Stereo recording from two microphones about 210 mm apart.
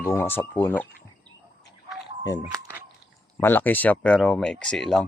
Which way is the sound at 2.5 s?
15° right (ahead or behind).